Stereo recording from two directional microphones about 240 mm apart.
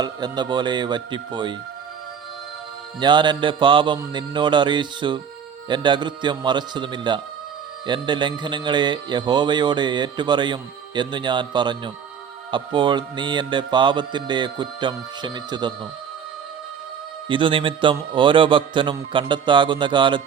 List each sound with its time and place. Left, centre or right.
0.0 s a man's voice: centre
3.0 s a man's voice: centre
17.2 s a man's voice: right